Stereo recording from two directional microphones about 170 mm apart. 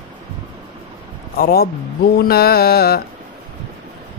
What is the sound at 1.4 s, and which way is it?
Speech, 65° left (ahead or behind).